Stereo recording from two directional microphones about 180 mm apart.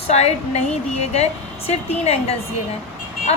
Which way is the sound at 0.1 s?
35° left (ahead or behind).